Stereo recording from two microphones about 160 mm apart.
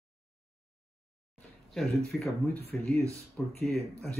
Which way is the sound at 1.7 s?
Centre (ahead or behind).